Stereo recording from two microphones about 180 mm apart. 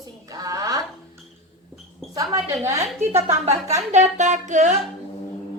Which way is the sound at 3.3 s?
35° right (ahead or behind).